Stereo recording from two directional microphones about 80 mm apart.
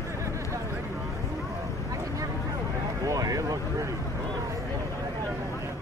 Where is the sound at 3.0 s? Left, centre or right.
Right.